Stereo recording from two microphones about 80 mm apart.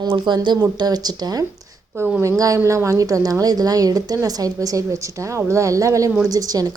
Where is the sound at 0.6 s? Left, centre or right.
Right.